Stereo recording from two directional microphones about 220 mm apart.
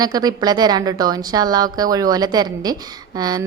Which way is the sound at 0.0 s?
15° right (ahead or behind).